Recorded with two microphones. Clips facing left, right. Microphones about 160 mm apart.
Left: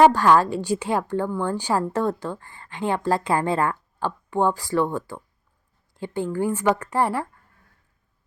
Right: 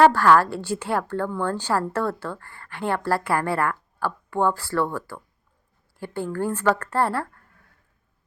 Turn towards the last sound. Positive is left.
turn(degrees=15)  # may be behind; listen again after turning